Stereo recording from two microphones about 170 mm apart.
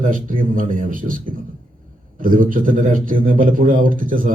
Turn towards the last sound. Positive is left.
turn(degrees=-55)  # may be behind; listen again after turning